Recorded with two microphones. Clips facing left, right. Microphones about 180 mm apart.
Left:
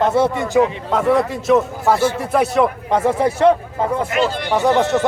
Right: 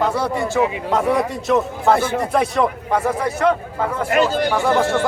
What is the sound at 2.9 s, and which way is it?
Speech, 25° left (ahead or behind).